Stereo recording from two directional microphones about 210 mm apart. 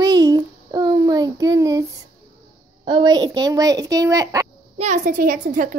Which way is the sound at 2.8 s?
20° right (ahead or behind).